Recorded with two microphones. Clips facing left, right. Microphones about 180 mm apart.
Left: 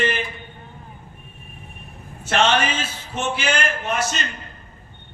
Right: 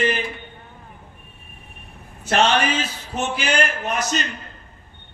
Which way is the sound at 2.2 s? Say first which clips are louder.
Right 1 dB; 35° right (ahead or behind).